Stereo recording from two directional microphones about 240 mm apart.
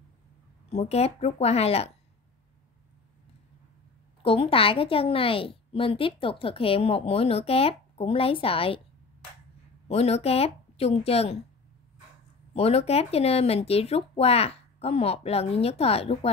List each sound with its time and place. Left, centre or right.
0.7 s a woman's voice: left
4.2 s a woman's voice: left
9.8 s a woman's voice: left
12.5 s a woman's voice: left